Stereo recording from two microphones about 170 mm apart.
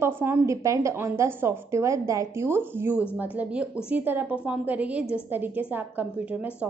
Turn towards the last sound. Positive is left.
turn(degrees=-10)  # may be behind; listen again after turning